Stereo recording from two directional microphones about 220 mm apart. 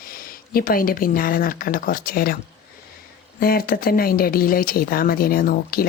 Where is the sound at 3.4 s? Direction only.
40° left (ahead or behind).